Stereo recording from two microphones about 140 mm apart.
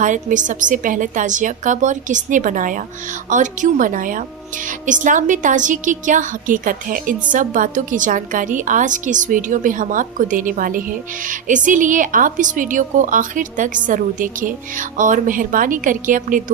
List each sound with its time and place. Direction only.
0.0 s a woman's voice: 65° right (ahead or behind)